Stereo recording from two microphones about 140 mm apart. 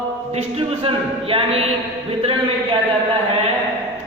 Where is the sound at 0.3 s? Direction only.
50° right (ahead or behind).